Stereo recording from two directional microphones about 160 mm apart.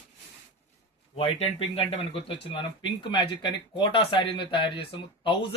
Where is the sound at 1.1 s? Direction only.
40° left (ahead or behind).